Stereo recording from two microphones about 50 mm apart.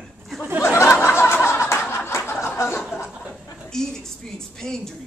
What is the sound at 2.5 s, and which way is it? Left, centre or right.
Speech, left.